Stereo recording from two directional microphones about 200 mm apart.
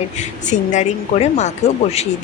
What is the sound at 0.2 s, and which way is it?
A woman's voice, 40° left (ahead or behind).